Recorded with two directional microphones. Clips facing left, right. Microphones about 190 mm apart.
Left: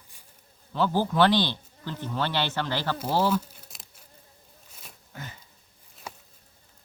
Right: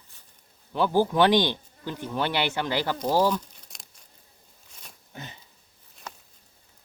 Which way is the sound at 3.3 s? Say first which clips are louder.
Left 5 dB; 5° left (ahead or behind).